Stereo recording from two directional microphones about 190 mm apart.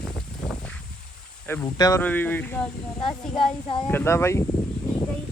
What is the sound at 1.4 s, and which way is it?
Speech, 15° left (ahead or behind).